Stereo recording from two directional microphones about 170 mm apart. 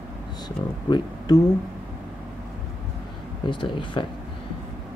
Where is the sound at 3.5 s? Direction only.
30° left (ahead or behind).